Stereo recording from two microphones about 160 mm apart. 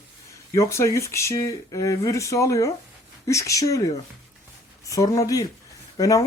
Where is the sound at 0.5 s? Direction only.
15° left (ahead or behind).